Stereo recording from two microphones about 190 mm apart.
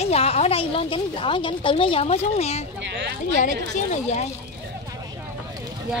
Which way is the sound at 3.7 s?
35° left (ahead or behind).